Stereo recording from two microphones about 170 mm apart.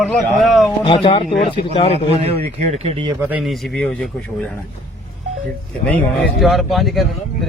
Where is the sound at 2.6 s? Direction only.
40° right (ahead or behind).